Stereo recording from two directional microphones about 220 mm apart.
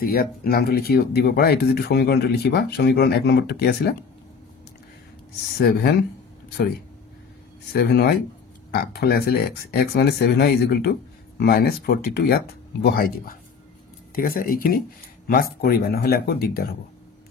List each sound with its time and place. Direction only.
0.0 s speech: 45° left (ahead or behind)
5.6 s speech: 45° left (ahead or behind)
7.7 s speech: 45° left (ahead or behind)